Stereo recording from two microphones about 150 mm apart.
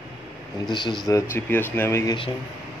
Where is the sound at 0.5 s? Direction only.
25° left (ahead or behind).